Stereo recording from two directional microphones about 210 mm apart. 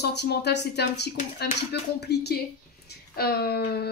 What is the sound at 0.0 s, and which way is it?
Speech, 50° left (ahead or behind).